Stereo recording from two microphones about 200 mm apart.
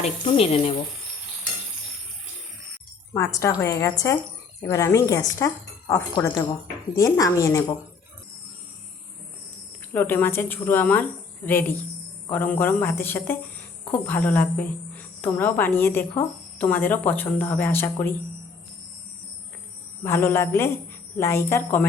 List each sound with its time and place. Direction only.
0.0 s speech: 30° left (ahead or behind)
3.1 s a woman's voice: 15° left (ahead or behind)
9.9 s a woman's voice: 10° left (ahead or behind)
20.1 s a woman's voice: 10° left (ahead or behind)